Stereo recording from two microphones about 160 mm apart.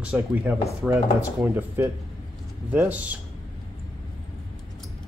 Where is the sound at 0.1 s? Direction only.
10° right (ahead or behind).